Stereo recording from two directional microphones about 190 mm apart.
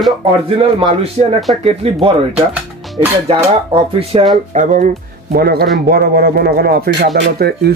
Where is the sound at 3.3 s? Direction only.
30° right (ahead or behind).